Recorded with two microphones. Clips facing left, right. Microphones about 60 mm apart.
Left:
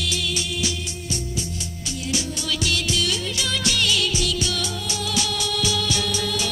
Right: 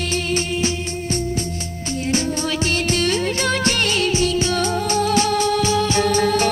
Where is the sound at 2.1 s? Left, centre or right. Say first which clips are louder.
Right 6 dB; right.